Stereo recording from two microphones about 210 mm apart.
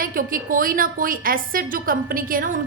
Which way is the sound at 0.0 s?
40° right (ahead or behind).